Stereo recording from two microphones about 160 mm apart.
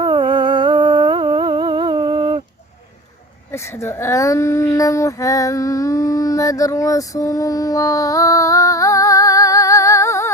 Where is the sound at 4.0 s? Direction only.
20° left (ahead or behind).